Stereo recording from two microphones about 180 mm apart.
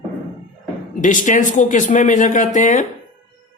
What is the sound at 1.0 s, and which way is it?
Speech, 45° left (ahead or behind).